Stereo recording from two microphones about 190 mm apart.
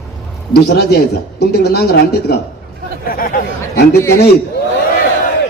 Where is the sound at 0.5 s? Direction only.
55° left (ahead or behind).